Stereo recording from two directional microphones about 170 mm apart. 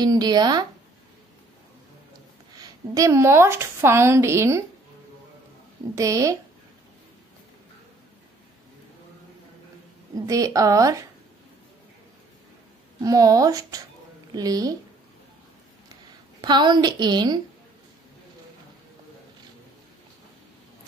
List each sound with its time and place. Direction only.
0.0 s a woman's voice: 25° right (ahead or behind)
2.6 s a woman's voice: 20° right (ahead or behind)
5.9 s a woman's voice: 20° right (ahead or behind)
10.1 s a woman's voice: 20° right (ahead or behind)
13.0 s a woman's voice: 20° right (ahead or behind)
16.3 s a woman's voice: 25° right (ahead or behind)